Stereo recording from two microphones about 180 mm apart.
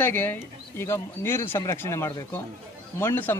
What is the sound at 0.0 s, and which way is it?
A man's voice, 10° left (ahead or behind).